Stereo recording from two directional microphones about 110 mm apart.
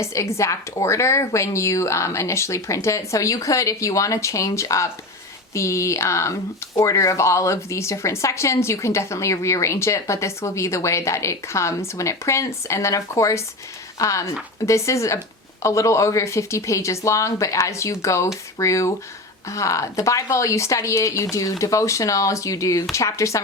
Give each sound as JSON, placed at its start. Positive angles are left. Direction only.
{"t": 0.0, "sound": "a woman's voice", "side_deg": 25}